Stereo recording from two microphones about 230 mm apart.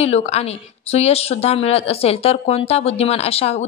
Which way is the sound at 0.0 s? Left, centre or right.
Left.